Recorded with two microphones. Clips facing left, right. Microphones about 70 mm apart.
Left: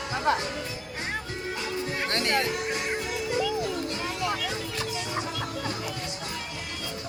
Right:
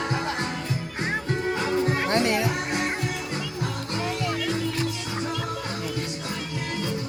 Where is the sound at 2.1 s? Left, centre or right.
Centre.